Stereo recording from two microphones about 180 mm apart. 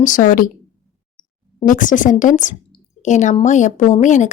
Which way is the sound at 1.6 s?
45° left (ahead or behind).